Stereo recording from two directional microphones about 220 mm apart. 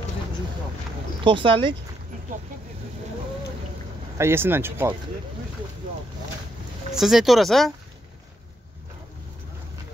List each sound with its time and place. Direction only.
1.2 s speech: 20° right (ahead or behind)
4.2 s speech: 10° right (ahead or behind)
7.0 s speech: centre (ahead or behind)